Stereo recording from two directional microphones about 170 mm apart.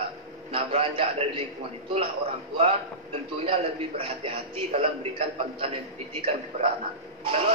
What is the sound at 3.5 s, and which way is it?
A man's voice, 35° right (ahead or behind).